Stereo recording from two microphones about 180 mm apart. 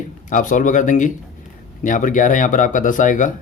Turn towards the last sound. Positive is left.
turn(degrees=45)  # may be behind; listen again after turning